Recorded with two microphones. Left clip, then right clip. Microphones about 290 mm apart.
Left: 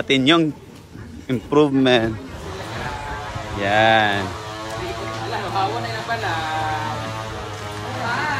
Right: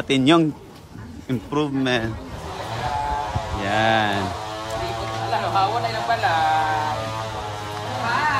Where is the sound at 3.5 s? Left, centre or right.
Centre.